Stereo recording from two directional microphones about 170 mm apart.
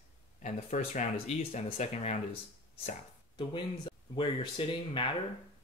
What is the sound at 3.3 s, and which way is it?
Speech, 30° left (ahead or behind).